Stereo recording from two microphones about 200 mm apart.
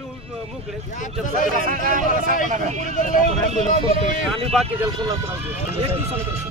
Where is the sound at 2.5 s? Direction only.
35° right (ahead or behind).